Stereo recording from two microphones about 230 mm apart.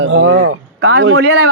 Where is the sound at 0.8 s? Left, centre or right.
Right.